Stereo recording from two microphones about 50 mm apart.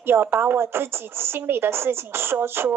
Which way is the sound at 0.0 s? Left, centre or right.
Right.